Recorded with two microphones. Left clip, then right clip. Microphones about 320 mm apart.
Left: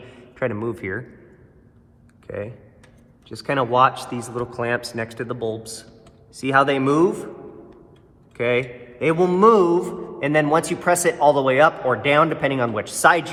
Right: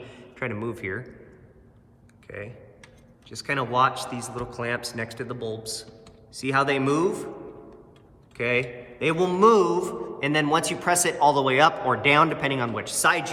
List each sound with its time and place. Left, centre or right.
0.3 s a man's voice: centre
2.2 s a man's voice: centre
8.4 s a man's voice: centre